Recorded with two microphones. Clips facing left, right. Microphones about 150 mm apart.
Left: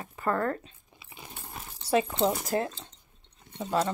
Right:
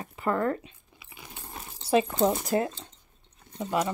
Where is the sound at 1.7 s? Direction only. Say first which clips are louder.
Right 2 dB; 15° right (ahead or behind).